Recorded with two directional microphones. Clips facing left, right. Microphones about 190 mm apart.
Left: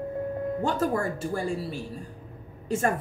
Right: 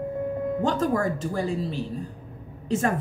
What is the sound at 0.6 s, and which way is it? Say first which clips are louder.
Speech: right 3 dB; 10° left (ahead or behind).